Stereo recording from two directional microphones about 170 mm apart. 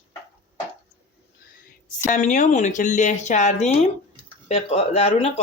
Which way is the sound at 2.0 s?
45° left (ahead or behind).